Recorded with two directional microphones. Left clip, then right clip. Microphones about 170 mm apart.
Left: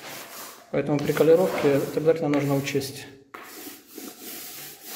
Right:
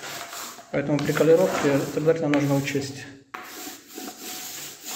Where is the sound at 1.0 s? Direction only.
15° left (ahead or behind).